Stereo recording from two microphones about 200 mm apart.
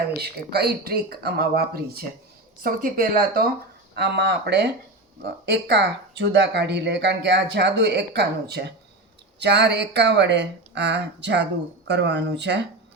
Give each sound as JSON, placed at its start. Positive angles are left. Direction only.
{"t": 0.2, "sound": "speech", "side_deg": -55}
{"t": 3.9, "sound": "speech", "side_deg": -55}